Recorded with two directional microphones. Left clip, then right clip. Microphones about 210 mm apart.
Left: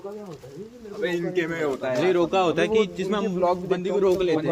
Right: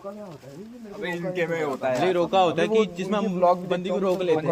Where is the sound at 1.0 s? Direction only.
35° right (ahead or behind).